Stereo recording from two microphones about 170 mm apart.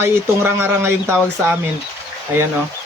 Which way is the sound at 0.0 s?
10° right (ahead or behind).